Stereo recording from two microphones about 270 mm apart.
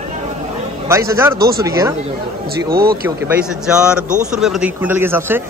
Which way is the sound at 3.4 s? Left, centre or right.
Centre.